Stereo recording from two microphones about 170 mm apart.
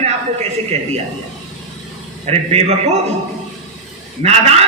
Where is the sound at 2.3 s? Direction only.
35° right (ahead or behind).